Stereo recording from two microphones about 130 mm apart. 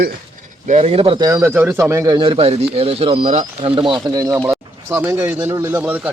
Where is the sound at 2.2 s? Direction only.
45° right (ahead or behind).